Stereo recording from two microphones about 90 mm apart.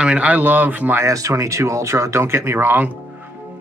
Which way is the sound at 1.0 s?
35° right (ahead or behind).